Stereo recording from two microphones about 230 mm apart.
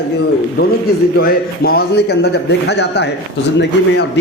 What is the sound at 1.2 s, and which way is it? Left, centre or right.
A man's voice, left.